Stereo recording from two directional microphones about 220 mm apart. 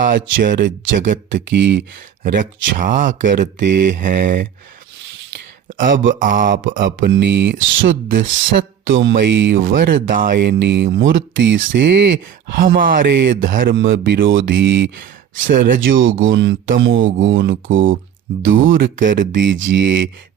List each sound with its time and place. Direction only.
0.4 s speech: 35° right (ahead or behind)
1.3 s speech: 55° right (ahead or behind)
2.2 s speech: 35° right (ahead or behind)
5.7 s speech: 35° right (ahead or behind)
13.8 s speech: 55° right (ahead or behind)
15.4 s speech: 40° right (ahead or behind)
15.8 s speech: 60° right (ahead or behind)
18.9 s speech: 35° right (ahead or behind)
19.4 s speech: 55° right (ahead or behind)